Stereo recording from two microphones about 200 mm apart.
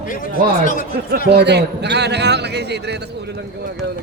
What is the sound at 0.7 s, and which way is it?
Speech, 45° left (ahead or behind).